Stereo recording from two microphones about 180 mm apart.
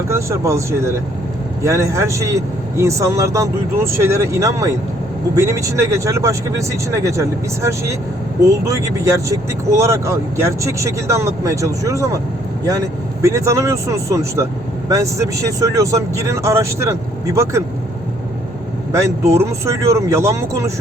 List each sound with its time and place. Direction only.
0.1 s speech: 15° right (ahead or behind)
13.2 s speech: 15° right (ahead or behind)
18.9 s speech: 15° right (ahead or behind)